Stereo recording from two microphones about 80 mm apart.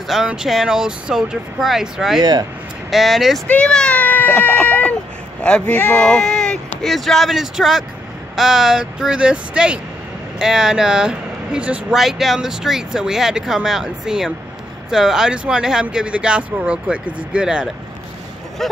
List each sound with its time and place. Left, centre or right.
0.0 s speech: centre
3.4 s speech: centre
12.0 s speech: centre
18.6 s speech: centre